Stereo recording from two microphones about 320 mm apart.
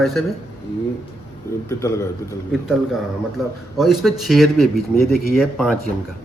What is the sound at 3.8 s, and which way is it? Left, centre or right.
Speech, centre.